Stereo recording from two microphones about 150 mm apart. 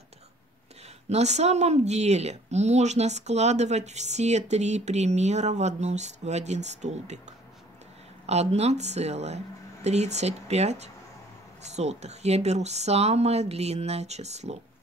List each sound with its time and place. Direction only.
0.8 s a woman's voice: 45° right (ahead or behind)